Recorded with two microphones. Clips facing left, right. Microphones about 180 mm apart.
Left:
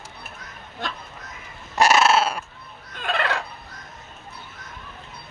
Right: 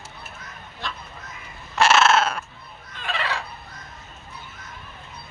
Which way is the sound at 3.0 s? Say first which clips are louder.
Left 4 dB; 50° left (ahead or behind).